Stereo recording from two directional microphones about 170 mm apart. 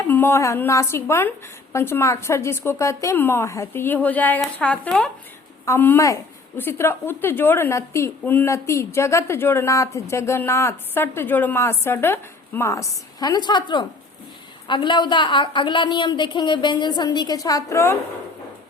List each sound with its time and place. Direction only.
0.0 s a woman's voice: 15° left (ahead or behind)